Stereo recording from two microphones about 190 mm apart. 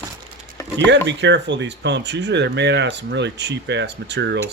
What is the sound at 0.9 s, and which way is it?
Speech, 65° right (ahead or behind).